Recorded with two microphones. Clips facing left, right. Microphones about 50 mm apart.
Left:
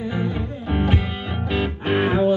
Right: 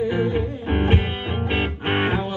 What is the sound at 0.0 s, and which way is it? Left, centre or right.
Music, right.